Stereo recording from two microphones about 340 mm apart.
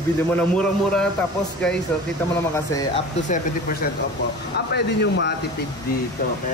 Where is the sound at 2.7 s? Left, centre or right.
Centre.